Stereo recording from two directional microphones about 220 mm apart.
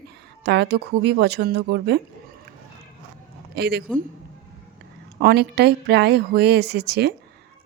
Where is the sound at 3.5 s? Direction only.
45° right (ahead or behind).